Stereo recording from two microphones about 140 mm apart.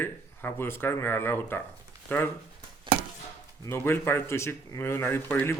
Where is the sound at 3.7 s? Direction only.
15° left (ahead or behind).